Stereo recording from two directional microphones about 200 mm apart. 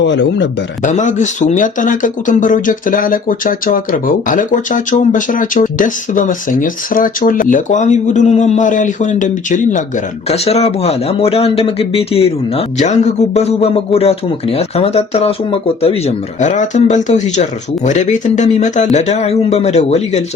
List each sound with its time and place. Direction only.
0.0 s a man's voice: 65° left (ahead or behind)
0.8 s speech: 40° left (ahead or behind)